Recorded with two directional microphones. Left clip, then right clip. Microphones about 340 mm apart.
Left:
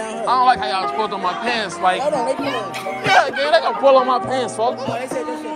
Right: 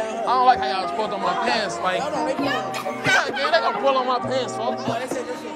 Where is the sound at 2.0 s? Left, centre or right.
Centre.